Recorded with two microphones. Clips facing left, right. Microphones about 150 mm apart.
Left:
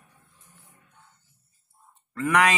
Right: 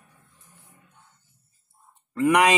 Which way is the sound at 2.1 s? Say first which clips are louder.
Right 3 dB; 20° right (ahead or behind).